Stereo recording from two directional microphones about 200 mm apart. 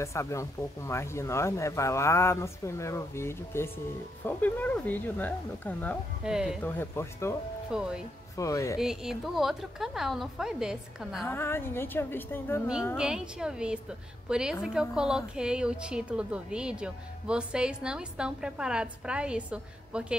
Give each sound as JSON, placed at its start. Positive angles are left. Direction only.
{"t": 0.0, "sound": "speech", "side_deg": 15}
{"t": 6.2, "sound": "a woman's voice", "side_deg": -5}
{"t": 6.6, "sound": "speech", "side_deg": 10}
{"t": 7.7, "sound": "a woman's voice", "side_deg": -5}
{"t": 8.4, "sound": "speech", "side_deg": 15}
{"t": 8.7, "sound": "a woman's voice", "side_deg": 0}
{"t": 11.2, "sound": "speech", "side_deg": 10}
{"t": 12.9, "sound": "a woman's voice", "side_deg": -5}